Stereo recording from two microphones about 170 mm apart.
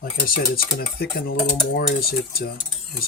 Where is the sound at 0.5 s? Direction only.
60° left (ahead or behind).